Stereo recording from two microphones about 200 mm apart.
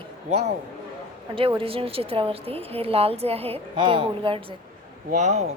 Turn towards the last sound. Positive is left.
turn(degrees=-35)  # may be behind; listen again after turning